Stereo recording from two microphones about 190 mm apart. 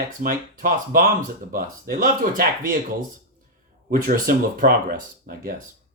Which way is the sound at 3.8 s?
50° right (ahead or behind).